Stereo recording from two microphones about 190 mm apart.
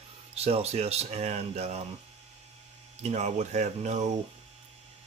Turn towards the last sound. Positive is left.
turn(degrees=-40)  # may be behind; listen again after turning